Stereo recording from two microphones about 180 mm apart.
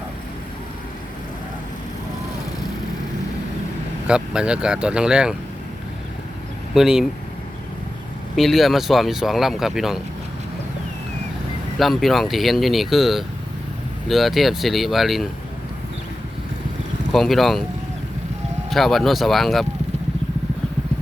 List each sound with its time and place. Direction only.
4.0 s speech: 5° right (ahead or behind)
6.7 s speech: 5° right (ahead or behind)
8.4 s speech: centre (ahead or behind)
11.8 s speech: centre (ahead or behind)
17.1 s speech: centre (ahead or behind)
18.7 s speech: centre (ahead or behind)